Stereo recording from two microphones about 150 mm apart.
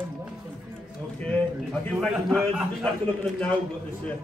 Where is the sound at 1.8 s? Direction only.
Centre (ahead or behind).